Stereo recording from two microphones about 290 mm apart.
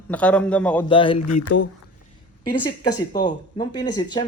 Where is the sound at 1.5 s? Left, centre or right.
Left.